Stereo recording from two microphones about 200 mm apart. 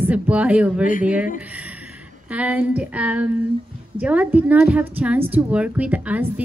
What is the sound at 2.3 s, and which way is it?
A woman's voice, 5° right (ahead or behind).